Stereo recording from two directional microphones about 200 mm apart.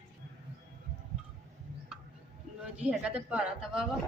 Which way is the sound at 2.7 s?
5° right (ahead or behind).